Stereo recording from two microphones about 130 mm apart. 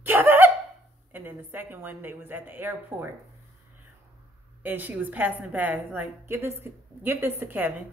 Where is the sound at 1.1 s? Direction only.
15° right (ahead or behind).